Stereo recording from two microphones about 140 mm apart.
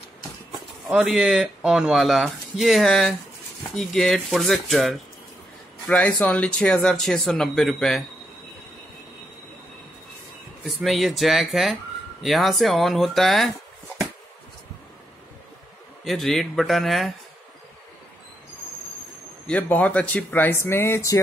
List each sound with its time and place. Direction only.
0.8 s speech: 5° right (ahead or behind)
10.7 s speech: centre (ahead or behind)
16.0 s speech: centre (ahead or behind)
19.4 s speech: 10° left (ahead or behind)